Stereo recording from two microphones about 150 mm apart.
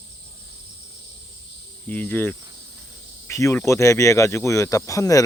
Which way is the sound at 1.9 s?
10° left (ahead or behind).